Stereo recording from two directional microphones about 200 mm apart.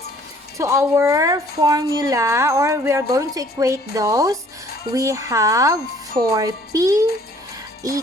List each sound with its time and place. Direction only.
0.5 s a woman's voice: 15° right (ahead or behind)